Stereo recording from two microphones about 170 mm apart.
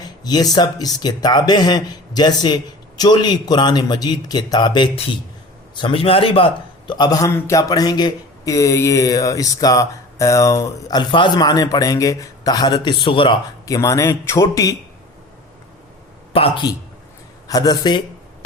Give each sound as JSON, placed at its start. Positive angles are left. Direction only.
{"t": 0.3, "sound": "a man's voice", "side_deg": 25}
{"t": 16.3, "sound": "speech", "side_deg": 35}
{"t": 17.5, "sound": "a man's voice", "side_deg": 20}